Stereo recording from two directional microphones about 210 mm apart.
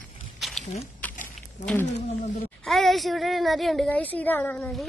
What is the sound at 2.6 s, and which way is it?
A woman's voice, centre (ahead or behind).